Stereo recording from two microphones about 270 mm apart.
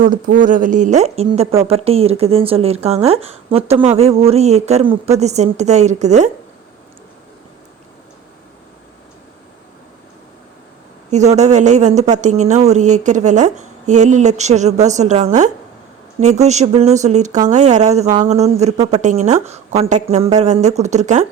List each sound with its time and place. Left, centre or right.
0.0 s speech: right
11.1 s speech: right